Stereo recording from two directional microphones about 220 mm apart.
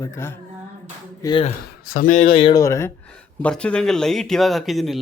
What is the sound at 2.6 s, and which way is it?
A man's voice, 15° left (ahead or behind).